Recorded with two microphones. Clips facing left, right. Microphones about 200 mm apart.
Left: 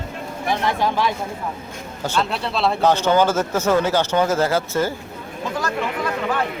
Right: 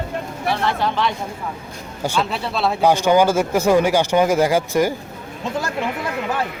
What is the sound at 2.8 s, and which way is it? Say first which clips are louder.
Speech: right 3 dB; 10° right (ahead or behind).